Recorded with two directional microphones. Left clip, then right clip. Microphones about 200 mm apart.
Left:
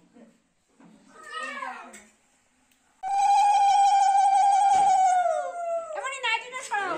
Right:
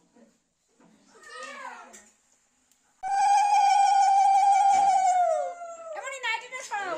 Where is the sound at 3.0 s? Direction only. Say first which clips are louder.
Left 1 dB; 55° right (ahead or behind).